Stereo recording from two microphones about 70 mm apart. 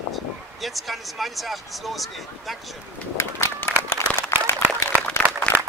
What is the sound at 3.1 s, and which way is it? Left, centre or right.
Run, left.